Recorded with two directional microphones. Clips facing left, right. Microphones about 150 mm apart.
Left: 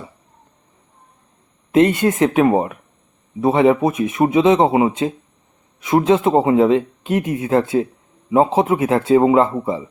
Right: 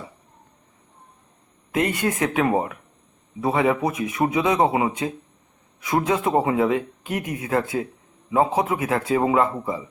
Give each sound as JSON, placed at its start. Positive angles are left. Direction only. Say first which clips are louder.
{"t": 1.7, "sound": "speech", "louder": "left 9 dB", "side_deg": 25}